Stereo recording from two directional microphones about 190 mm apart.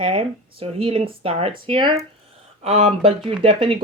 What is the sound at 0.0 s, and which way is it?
Speech, 30° right (ahead or behind).